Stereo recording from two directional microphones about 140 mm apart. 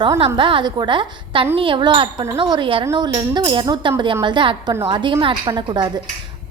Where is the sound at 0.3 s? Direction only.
35° right (ahead or behind).